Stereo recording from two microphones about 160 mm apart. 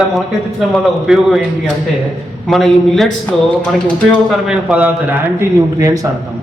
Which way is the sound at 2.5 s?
Centre (ahead or behind).